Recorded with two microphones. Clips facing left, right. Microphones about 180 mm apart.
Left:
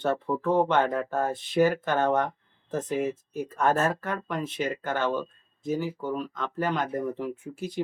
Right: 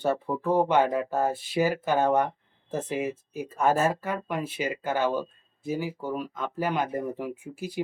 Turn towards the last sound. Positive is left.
turn(degrees=-10)  # may be behind; listen again after turning